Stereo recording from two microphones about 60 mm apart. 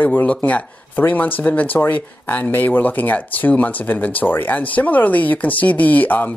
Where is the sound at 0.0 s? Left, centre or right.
Left.